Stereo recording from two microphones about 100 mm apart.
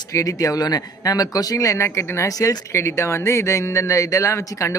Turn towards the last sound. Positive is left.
turn(degrees=30)  # may be behind; listen again after turning